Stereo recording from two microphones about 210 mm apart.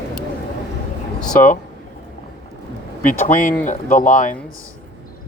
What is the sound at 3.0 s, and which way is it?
Speech, 40° left (ahead or behind).